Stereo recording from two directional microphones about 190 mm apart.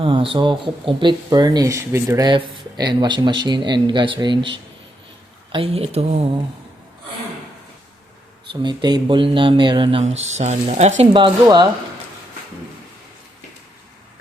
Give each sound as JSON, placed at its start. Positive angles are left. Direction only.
{"t": 0.0, "sound": "speech", "side_deg": -30}
{"t": 5.5, "sound": "speech", "side_deg": -30}
{"t": 8.6, "sound": "speech", "side_deg": -25}
{"t": 11.1, "sound": "speech", "side_deg": -25}